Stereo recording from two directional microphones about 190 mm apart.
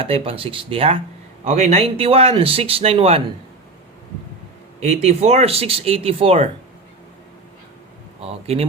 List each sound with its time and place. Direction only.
0.0 s speech: 30° right (ahead or behind)
4.8 s speech: 35° right (ahead or behind)
8.2 s speech: 30° right (ahead or behind)